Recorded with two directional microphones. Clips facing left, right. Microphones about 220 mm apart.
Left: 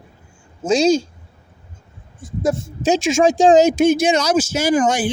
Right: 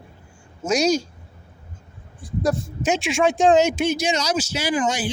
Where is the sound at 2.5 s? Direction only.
35° left (ahead or behind).